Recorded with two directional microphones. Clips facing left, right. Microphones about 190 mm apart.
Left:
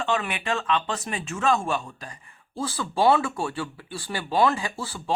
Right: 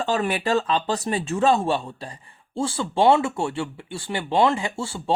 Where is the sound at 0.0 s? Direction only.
35° right (ahead or behind).